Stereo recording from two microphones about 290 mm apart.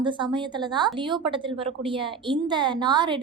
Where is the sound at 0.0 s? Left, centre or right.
Centre.